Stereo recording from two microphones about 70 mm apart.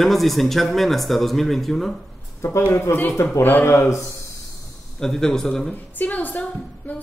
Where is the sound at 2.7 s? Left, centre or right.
Left.